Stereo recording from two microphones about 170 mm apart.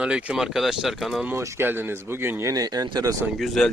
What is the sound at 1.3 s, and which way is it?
Speech, 15° right (ahead or behind).